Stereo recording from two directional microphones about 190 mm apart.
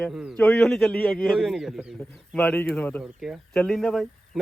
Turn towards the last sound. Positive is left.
turn(degrees=0)  # may be behind; listen again after turning